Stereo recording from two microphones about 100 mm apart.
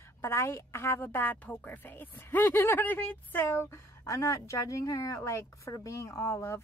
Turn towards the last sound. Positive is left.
turn(degrees=30)  # may be behind; listen again after turning